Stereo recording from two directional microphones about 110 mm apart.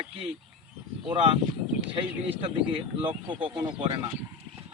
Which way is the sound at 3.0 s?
50° right (ahead or behind).